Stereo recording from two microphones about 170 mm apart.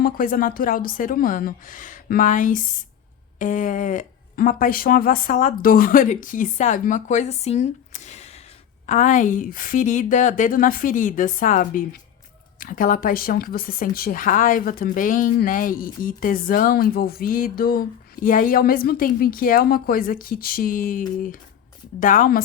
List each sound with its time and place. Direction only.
0.0 s a woman's voice: 55° left (ahead or behind)